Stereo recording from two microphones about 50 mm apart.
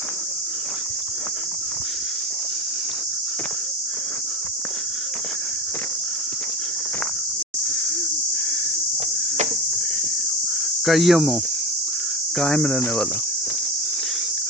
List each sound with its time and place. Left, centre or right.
10.8 s cricket: centre
12.4 s cricket: left